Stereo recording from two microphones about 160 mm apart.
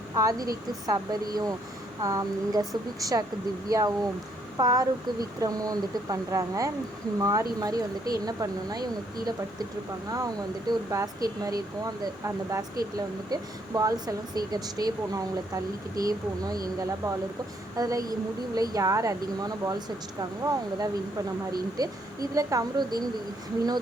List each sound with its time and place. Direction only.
0.2 s speech: 20° right (ahead or behind)
10.7 s speech: 25° right (ahead or behind)